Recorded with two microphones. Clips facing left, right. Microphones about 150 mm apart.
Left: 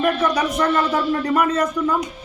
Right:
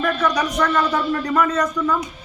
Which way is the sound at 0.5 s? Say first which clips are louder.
Left 1 dB; 30° left (ahead or behind).